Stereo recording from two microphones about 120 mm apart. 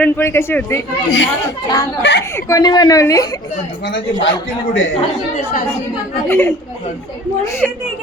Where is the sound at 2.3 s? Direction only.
30° left (ahead or behind).